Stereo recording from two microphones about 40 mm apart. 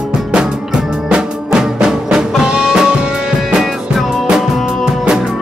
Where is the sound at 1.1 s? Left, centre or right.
Centre.